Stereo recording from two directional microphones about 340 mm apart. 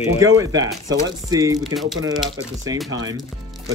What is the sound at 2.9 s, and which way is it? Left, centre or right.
Speech, centre.